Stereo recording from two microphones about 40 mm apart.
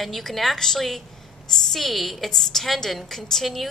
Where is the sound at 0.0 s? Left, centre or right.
Centre.